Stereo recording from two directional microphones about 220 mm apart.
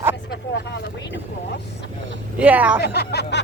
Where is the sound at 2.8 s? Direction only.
50° left (ahead or behind).